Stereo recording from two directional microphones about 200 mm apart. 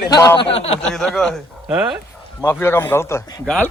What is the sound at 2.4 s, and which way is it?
A man's voice, 10° left (ahead or behind).